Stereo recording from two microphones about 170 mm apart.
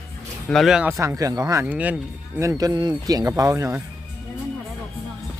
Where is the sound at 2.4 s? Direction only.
20° right (ahead or behind).